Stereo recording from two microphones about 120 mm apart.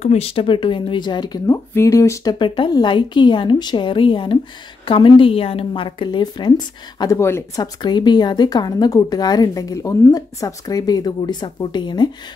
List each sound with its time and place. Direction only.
0.0 s a woman's voice: 60° left (ahead or behind); by 1.6 s 35° left (ahead or behind)
1.7 s speech: 25° left (ahead or behind)
2.3 s a woman's voice: 45° left (ahead or behind)
7.2 s speech: 20° left (ahead or behind); by 12.1 s 40° left (ahead or behind)